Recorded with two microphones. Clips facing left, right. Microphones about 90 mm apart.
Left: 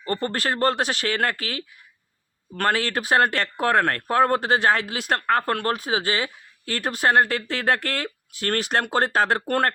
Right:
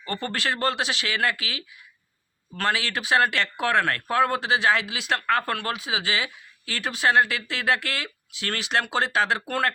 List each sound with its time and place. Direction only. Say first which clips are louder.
0.0 s speech: left 3 dB; 40° left (ahead or behind)
5.2 s speech: left 4 dB; 35° left (ahead or behind)